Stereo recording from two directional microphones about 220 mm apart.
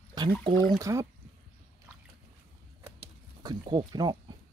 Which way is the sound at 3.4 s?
20° right (ahead or behind).